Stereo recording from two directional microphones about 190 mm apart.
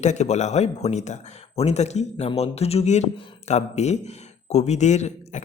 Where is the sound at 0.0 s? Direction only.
40° left (ahead or behind).